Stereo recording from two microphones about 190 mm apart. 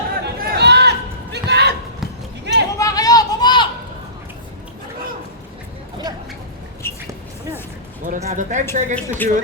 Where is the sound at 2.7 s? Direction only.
20° left (ahead or behind).